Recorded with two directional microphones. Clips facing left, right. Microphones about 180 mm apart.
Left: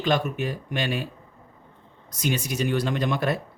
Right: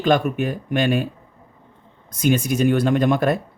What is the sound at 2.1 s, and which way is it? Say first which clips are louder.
Speech: right 8 dB; 50° right (ahead or behind).